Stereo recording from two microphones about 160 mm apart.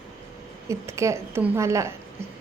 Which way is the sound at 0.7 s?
20° right (ahead or behind).